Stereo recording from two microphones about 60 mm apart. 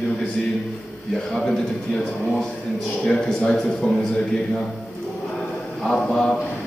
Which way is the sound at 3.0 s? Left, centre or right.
Centre.